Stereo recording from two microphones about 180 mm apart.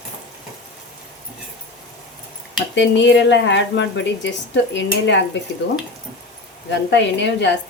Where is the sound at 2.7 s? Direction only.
80° left.